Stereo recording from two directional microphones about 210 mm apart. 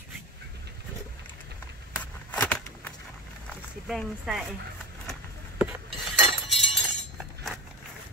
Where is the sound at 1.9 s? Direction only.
5° left (ahead or behind).